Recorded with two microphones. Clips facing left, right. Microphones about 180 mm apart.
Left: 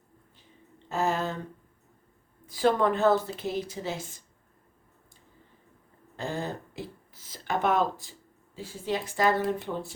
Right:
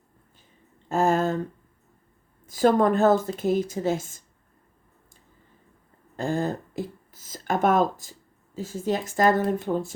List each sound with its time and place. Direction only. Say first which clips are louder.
0.9 s a sound: right 6 dB; 45° right (ahead or behind)
2.5 s a woman's voice: right 4 dB; 45° right (ahead or behind)
6.1 s a woman's voice: right 7 dB; 45° right (ahead or behind)